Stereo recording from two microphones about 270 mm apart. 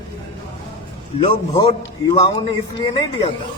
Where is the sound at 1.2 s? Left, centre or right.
Centre.